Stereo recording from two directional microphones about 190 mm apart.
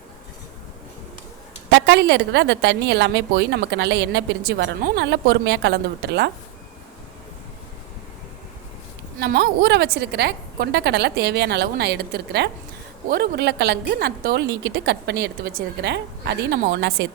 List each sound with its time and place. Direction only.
1.7 s a woman's voice: 65° right (ahead or behind)
9.2 s a woman's voice: 60° right (ahead or behind)